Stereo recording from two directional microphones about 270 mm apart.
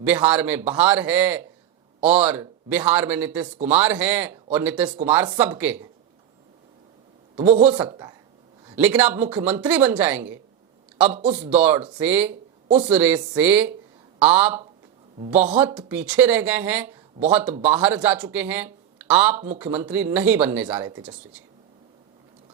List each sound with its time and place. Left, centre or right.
0.0 s speech: centre
7.4 s a man's voice: right
7.9 s speech: centre
12.6 s speech: right
12.9 s speech: centre